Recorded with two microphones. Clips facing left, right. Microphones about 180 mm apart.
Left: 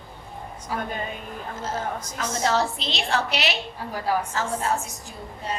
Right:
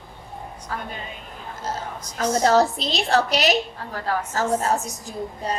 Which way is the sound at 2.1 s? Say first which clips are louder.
Right 7 dB; 40° right (ahead or behind).